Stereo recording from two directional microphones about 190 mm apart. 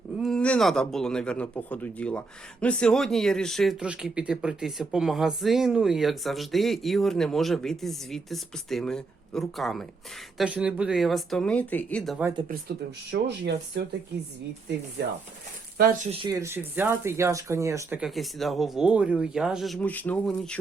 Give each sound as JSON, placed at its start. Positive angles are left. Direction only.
{"t": 0.2, "sound": "speech", "side_deg": 5}
{"t": 12.5, "sound": "speech", "side_deg": -60}
{"t": 15.8, "sound": "speech", "side_deg": -50}
{"t": 16.3, "sound": "speech", "side_deg": -15}